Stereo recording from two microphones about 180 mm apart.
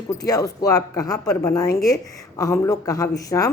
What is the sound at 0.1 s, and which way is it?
Speech, 20° left (ahead or behind).